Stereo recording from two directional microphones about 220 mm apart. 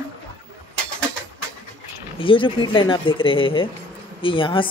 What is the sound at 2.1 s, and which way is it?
Speech, 25° left (ahead or behind).